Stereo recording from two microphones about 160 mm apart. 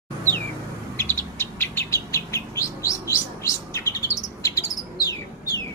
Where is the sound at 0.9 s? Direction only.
15° left (ahead or behind).